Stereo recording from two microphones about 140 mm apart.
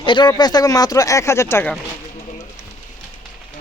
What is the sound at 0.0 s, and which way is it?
Speech, 35° left (ahead or behind).